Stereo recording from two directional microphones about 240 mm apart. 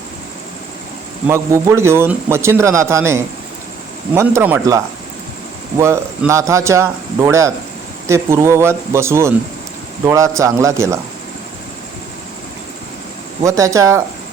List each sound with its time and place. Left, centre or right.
1.3 s a man's voice: centre
5.8 s a man's voice: centre
13.4 s a man's voice: centre